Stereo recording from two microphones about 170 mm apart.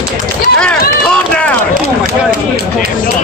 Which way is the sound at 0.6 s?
5° left (ahead or behind).